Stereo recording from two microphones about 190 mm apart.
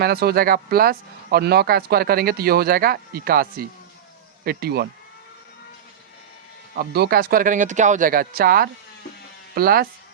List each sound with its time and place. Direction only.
0.0 s speech: 55° right (ahead or behind)
4.4 s speech: 55° right (ahead or behind)
6.7 s speech: 55° right (ahead or behind)